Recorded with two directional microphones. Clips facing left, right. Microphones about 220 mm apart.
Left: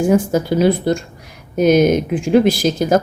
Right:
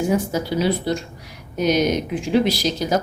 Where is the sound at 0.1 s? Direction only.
50° left (ahead or behind).